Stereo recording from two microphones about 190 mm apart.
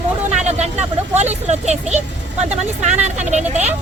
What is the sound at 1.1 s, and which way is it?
Speech, 35° right (ahead or behind).